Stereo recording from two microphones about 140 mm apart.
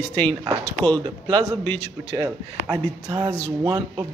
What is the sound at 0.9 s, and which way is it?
Speech, 30° right (ahead or behind).